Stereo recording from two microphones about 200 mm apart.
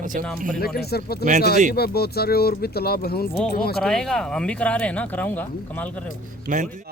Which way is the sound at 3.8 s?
5° left (ahead or behind).